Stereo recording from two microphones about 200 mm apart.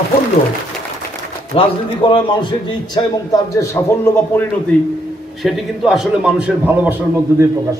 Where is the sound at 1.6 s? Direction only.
25° left (ahead or behind).